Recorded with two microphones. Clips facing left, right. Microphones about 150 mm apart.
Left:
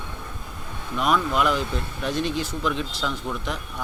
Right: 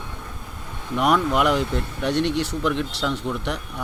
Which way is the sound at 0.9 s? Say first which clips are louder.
Right 3 dB; 75° right (ahead or behind).